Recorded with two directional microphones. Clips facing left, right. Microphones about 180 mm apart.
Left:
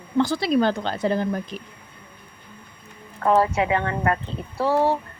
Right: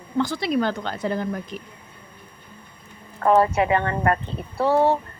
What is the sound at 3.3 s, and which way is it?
Speech, 55° right (ahead or behind).